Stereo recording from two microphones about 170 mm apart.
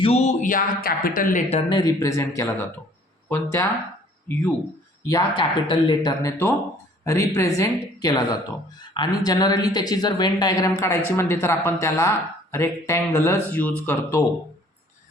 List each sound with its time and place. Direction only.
0.0 s speech: 40° left (ahead or behind)
1.7 s a woman's voice: 25° left (ahead or behind)
5.4 s a woman's voice: 25° left (ahead or behind)